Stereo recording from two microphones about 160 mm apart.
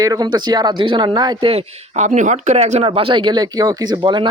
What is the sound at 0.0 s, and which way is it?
Speech, 25° right (ahead or behind).